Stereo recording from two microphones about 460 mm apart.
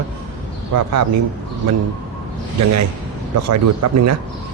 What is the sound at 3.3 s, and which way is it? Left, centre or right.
Speech, right.